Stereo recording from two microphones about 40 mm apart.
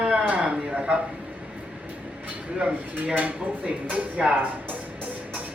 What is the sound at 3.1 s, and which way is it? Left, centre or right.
Female singing, right.